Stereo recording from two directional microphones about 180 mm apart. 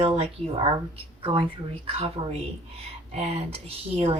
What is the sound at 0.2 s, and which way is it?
Speech, 35° right (ahead or behind).